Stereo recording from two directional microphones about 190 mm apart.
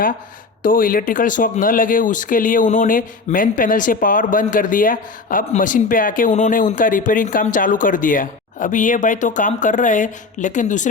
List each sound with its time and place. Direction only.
0.6 s speech: 45° left (ahead or behind)